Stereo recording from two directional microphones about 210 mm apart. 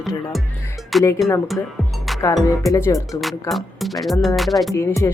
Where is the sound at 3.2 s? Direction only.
Centre (ahead or behind).